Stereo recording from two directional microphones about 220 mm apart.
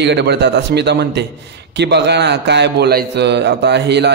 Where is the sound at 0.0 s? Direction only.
50° right (ahead or behind).